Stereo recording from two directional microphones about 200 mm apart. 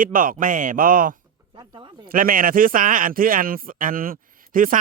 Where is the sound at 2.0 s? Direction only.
45° right (ahead or behind).